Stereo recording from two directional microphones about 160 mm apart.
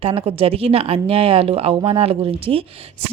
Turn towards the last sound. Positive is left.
turn(degrees=-35)  # may be behind; listen again after turning